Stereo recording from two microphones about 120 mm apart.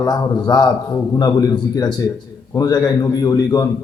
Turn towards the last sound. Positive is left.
turn(degrees=30)  # may be behind; listen again after turning